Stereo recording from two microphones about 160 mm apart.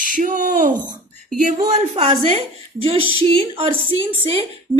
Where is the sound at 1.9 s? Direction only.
40° right (ahead or behind).